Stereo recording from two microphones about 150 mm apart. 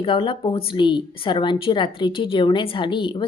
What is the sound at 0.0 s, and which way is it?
A woman's voice, 35° left (ahead or behind).